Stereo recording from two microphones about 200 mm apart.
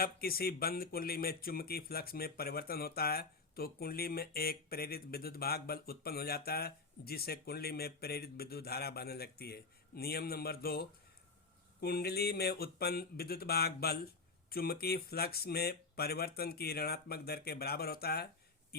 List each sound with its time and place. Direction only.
0.0 s speech: 50° left (ahead or behind)